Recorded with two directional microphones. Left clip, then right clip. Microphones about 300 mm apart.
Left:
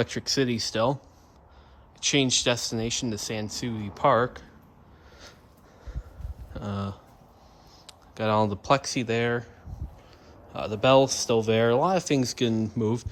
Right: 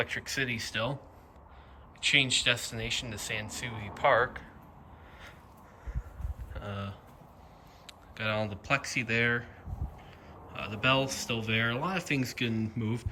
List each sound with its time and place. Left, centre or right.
0.0 s speech: centre
2.0 s speech: centre
6.5 s speech: centre
10.5 s speech: centre